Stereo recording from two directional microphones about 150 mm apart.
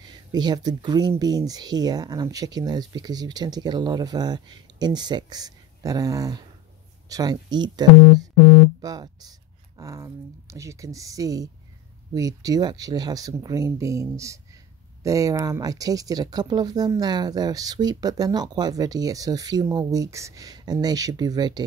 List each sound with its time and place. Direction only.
0.0 s speech: 25° right (ahead or behind)